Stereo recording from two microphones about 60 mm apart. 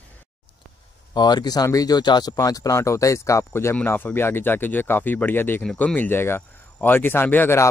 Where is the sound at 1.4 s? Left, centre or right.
Left.